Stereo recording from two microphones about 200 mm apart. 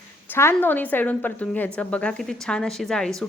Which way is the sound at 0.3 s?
10° left (ahead or behind).